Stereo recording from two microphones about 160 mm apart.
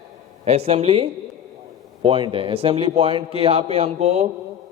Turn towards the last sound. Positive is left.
turn(degrees=-45)  # may be behind; listen again after turning